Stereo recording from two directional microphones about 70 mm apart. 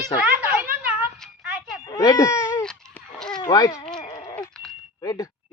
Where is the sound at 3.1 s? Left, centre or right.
Centre.